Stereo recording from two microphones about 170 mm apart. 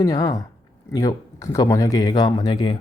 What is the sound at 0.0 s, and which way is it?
Speech, 20° left (ahead or behind).